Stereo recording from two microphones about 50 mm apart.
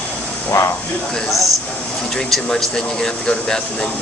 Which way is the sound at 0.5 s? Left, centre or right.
Left.